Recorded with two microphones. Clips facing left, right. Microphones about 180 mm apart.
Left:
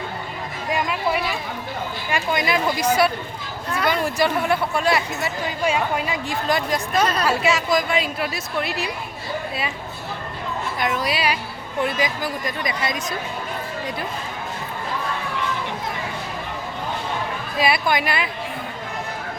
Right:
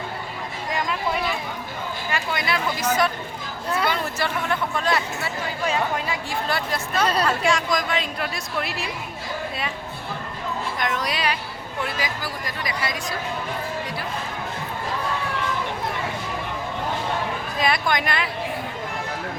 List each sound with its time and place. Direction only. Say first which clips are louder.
0.7 s a sound: left 3 dB; 15° left (ahead or behind)
2.0 s a woman's voice: left 4 dB; 15° left (ahead or behind); by 8.9 s centre (ahead or behind)
10.8 s speech: left 4 dB; 5° left (ahead or behind)
11.9 s speech: left 5 dB; 20° left (ahead or behind)
17.6 s speech: left 3 dB; 5° left (ahead or behind)